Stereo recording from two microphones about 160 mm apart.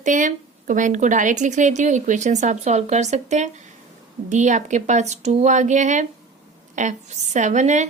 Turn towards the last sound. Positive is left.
turn(degrees=-50)  # may be behind; listen again after turning